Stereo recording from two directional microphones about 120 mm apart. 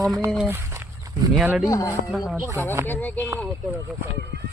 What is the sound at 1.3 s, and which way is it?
Speech, 10° right (ahead or behind).